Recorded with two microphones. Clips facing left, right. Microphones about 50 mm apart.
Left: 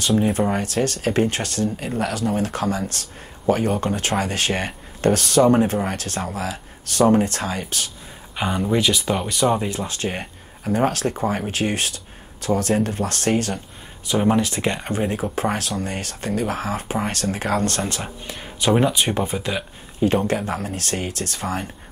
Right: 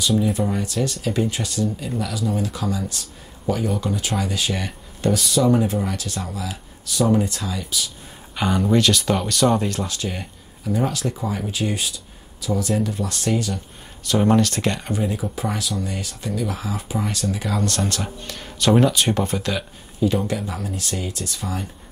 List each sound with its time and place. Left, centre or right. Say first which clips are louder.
0.3 s speech: left 2 dB; left
8.4 s speech: right 2 dB; centre
9.8 s speech: left 2 dB; left
14.0 s speech: right 1 dB; centre
14.8 s speech: left 1 dB; left
17.8 s speech: right 1 dB; left
20.0 s speech: left 2 dB; left